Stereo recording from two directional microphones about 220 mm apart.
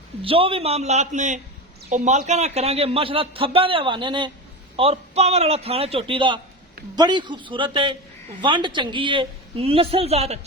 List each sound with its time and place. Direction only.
0.2 s a man's voice: 25° right (ahead or behind)